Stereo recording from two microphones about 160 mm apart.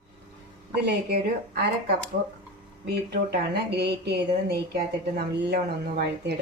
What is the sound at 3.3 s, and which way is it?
A woman's voice, 85° right.